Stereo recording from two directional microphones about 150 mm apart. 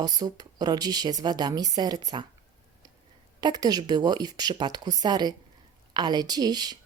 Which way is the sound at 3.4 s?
25° right (ahead or behind).